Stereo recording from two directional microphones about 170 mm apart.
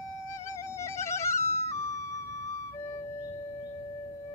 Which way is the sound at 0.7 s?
15° left (ahead or behind).